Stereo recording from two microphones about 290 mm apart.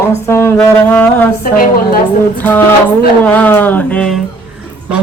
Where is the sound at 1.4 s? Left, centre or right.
Left.